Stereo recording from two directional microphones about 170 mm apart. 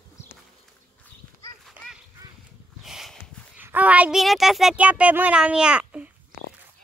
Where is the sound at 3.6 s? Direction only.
10° right (ahead or behind).